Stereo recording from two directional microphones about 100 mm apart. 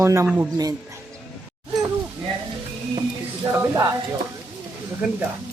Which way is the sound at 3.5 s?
25° right (ahead or behind).